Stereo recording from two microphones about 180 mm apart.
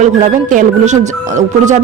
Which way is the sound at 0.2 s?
40° right (ahead or behind).